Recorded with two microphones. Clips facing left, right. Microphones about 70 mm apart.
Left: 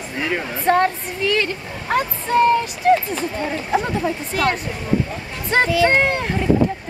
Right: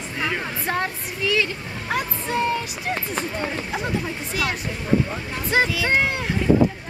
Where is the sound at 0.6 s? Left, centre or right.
Left.